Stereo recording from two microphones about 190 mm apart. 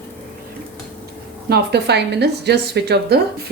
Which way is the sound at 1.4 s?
60° right (ahead or behind).